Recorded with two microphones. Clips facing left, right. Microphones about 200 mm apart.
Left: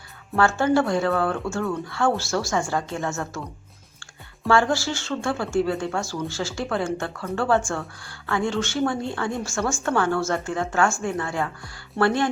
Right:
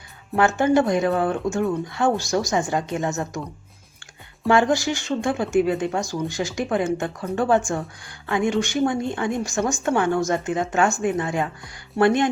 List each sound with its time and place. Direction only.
0.3 s speech: 15° right (ahead or behind)
4.4 s speech: 20° right (ahead or behind)